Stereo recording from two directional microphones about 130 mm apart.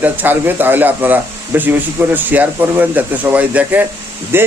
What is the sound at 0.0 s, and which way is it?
Speech, 15° right (ahead or behind).